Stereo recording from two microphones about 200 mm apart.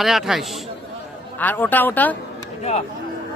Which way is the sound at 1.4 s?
10° left (ahead or behind).